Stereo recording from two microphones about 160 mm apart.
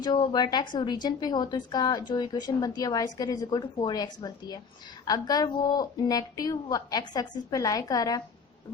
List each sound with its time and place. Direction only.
0.0 s speech: 30° left (ahead or behind)